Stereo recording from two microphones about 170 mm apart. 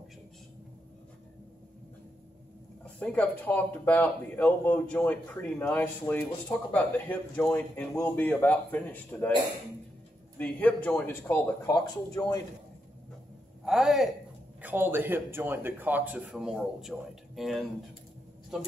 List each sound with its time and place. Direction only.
2.8 s speech: 5° left (ahead or behind)
10.4 s speech: 10° left (ahead or behind)
13.7 s a man's voice: centre (ahead or behind)
14.6 s a man's voice: 10° right (ahead or behind)